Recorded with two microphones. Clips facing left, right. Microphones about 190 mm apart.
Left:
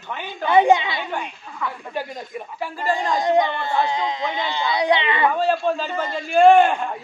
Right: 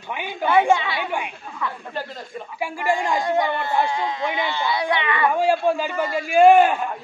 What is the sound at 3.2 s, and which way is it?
Speech, 20° left (ahead or behind).